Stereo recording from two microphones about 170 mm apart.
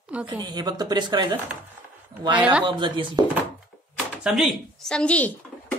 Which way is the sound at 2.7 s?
30° right (ahead or behind).